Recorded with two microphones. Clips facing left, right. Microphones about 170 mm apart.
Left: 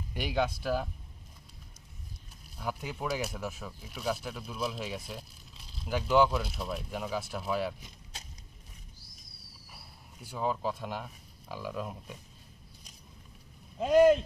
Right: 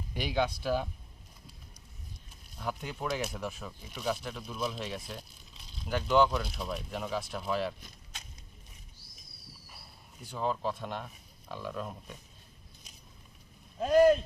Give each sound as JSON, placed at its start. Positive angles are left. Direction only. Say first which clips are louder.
{"t": 0.1, "sound": "speech", "louder": "even", "side_deg": 0}
{"t": 2.6, "sound": "speech", "louder": "even", "side_deg": 5}
{"t": 9.6, "sound": "speech", "louder": "left 1 dB", "side_deg": 5}
{"t": 13.7, "sound": "speech", "louder": "left 1 dB", "side_deg": 20}